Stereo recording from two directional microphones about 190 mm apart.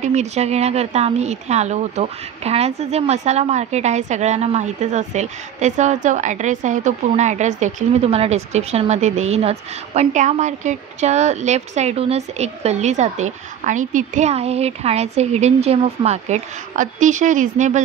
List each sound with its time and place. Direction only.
0.0 s speech: 35° right (ahead or behind)